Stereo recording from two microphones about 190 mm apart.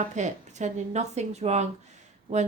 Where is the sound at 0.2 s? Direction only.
40° right (ahead or behind).